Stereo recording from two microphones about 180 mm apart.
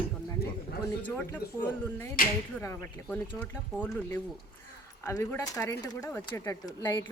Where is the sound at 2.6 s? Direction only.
10° left (ahead or behind).